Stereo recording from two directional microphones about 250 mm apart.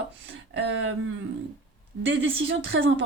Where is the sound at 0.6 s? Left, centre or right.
Right.